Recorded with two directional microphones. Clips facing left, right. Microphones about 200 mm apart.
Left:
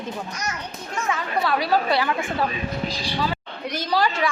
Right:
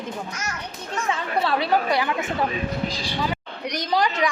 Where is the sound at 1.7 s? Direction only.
15° right (ahead or behind).